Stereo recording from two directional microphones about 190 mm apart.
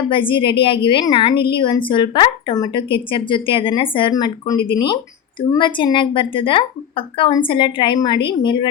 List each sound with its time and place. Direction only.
0.1 s a woman's voice: 25° left (ahead or behind)